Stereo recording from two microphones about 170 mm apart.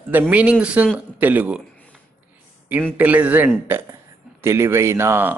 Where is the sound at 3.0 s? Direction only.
10° right (ahead or behind).